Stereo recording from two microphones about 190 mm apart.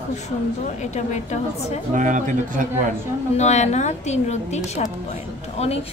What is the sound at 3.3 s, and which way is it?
A woman's voice, 35° left (ahead or behind).